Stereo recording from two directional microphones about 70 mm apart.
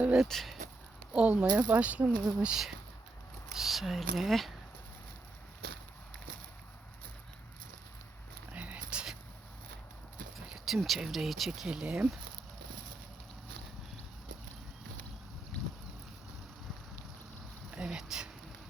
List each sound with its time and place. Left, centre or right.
0.2 s speech: centre
1.1 s speech: centre
3.5 s speech: centre
8.5 s a sound: right
10.3 s speech: centre
17.7 s a sound: centre